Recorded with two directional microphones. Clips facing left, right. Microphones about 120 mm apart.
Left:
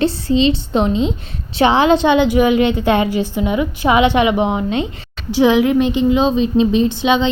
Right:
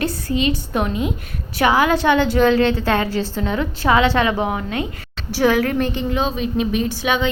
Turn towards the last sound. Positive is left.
turn(degrees=20)  # may be behind; listen again after turning